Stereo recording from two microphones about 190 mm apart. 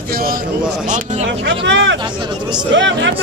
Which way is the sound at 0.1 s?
50° right (ahead or behind).